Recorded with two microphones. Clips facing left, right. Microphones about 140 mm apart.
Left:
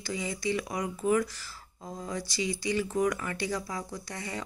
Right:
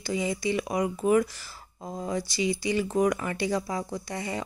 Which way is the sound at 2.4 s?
15° right (ahead or behind).